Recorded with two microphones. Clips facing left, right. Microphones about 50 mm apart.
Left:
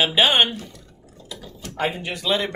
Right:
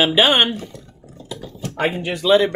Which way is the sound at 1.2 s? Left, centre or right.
Right.